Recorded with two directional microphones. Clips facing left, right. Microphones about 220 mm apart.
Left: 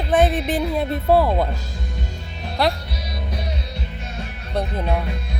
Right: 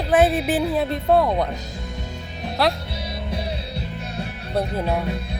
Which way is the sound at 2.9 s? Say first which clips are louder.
Right 1 dB; 25° right (ahead or behind).